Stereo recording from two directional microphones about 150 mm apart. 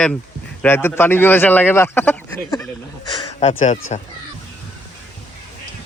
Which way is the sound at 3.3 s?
50° left (ahead or behind).